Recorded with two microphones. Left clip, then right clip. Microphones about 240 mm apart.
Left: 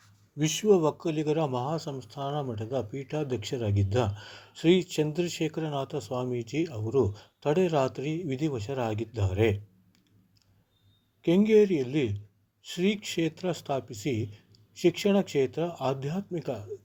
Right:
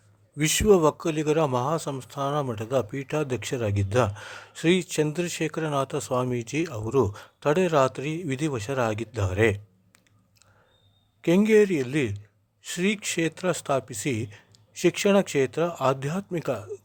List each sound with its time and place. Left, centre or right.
0.3 s speech: right
11.2 s speech: right